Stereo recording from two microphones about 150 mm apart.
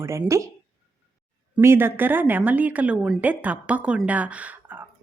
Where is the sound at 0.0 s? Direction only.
20° right (ahead or behind).